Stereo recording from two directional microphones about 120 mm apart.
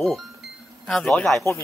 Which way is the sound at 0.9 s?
5° left (ahead or behind).